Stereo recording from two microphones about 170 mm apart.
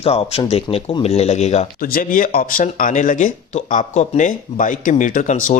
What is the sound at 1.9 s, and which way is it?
Speech, 55° left (ahead or behind).